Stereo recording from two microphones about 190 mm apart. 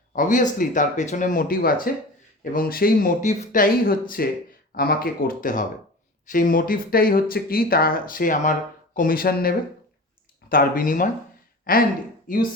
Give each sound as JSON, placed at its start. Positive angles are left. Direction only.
{"t": 0.1, "sound": "speech", "side_deg": 45}